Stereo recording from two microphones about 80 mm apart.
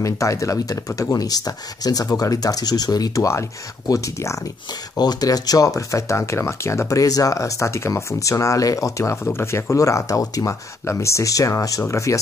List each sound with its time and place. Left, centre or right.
0.0 s speech: left
3.8 s speech: left
4.9 s speech: left